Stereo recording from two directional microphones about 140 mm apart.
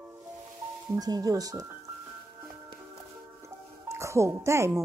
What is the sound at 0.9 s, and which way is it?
Speech, 25° right (ahead or behind).